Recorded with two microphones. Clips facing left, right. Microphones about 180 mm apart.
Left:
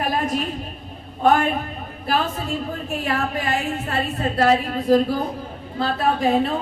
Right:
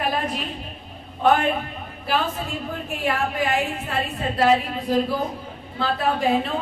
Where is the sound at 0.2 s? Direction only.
45° left (ahead or behind).